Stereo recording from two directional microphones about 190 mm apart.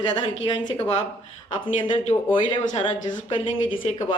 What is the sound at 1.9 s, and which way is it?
Speech, 35° left (ahead or behind).